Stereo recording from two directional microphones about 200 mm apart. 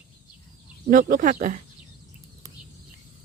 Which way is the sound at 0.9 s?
45° right (ahead or behind).